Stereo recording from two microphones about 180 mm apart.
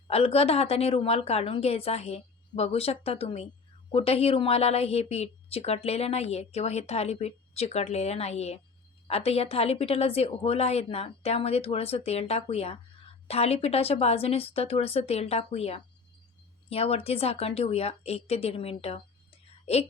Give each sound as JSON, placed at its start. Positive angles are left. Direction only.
{"t": 0.1, "sound": "a woman's voice", "side_deg": 35}